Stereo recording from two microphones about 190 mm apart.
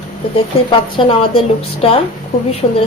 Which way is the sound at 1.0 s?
25° left (ahead or behind).